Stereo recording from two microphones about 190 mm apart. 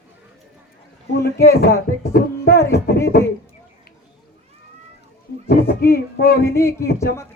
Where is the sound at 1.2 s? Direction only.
50° left (ahead or behind).